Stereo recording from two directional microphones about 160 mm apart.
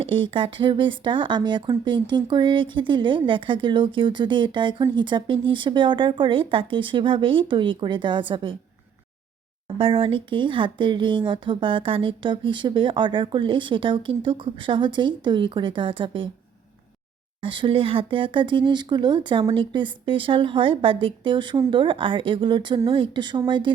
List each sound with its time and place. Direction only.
0.0 s speech: 35° right (ahead or behind)
9.7 s speech: 35° right (ahead or behind)
17.4 s speech: 30° right (ahead or behind)